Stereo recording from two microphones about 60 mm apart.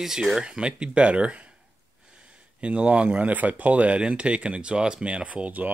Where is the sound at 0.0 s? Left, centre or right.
Centre.